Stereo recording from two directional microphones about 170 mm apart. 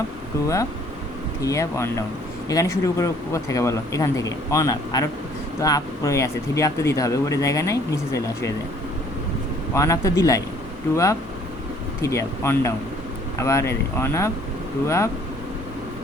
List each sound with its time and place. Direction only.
0.4 s speech: 20° left (ahead or behind)
9.7 s speech: 20° left (ahead or behind)